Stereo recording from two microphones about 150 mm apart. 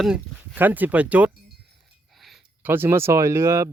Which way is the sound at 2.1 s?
Centre (ahead or behind).